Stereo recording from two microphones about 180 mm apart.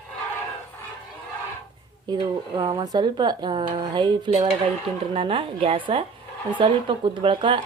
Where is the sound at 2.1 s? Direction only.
25° right (ahead or behind).